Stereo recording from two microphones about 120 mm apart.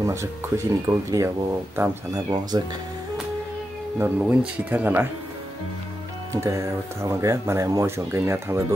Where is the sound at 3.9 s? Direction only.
15° right (ahead or behind).